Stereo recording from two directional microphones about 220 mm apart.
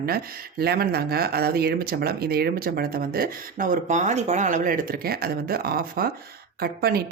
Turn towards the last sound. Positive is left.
turn(degrees=-45)  # may be behind; listen again after turning